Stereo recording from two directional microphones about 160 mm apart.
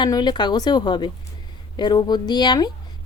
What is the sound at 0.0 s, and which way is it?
Speech, 25° left (ahead or behind).